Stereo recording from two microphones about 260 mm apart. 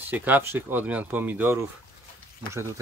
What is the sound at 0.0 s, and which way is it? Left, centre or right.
Speech, centre.